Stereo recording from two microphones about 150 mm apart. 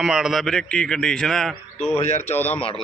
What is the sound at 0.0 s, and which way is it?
A man's voice, 5° right (ahead or behind).